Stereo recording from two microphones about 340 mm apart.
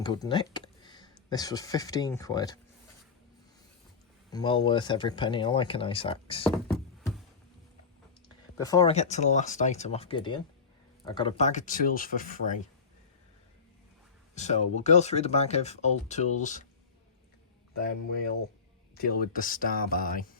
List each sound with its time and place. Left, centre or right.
0.0 s speech: centre
4.3 s speech: centre
8.5 s speech: centre
14.3 s speech: centre
18.9 s speech: left